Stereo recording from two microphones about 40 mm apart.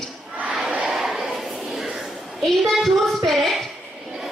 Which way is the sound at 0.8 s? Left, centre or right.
Centre.